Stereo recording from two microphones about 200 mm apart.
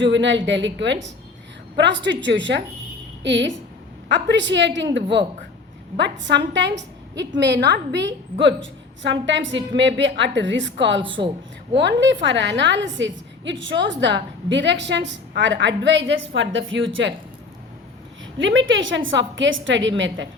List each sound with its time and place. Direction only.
0.0 s a woman's voice: 65° right (ahead or behind)
6.0 s a woman's voice: 65° right (ahead or behind)
18.3 s a woman's voice: 70° right (ahead or behind)